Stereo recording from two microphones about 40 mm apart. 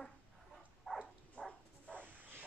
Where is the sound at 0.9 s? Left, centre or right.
Centre.